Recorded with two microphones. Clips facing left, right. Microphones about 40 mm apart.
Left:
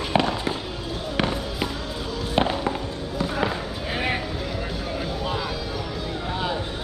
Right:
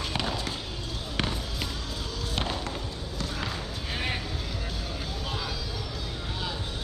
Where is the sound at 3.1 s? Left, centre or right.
Centre.